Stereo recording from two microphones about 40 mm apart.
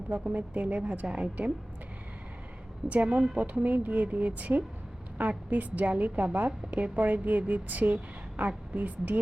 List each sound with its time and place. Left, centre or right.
0.1 s a woman's voice: right
2.9 s a woman's voice: right